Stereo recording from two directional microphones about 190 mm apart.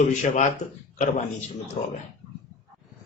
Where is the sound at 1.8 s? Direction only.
35° left (ahead or behind).